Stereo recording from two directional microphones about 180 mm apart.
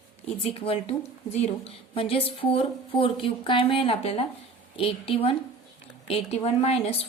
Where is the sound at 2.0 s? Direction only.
30° left (ahead or behind).